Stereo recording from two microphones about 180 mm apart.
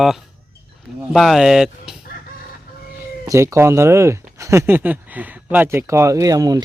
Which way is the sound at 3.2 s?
15° right (ahead or behind).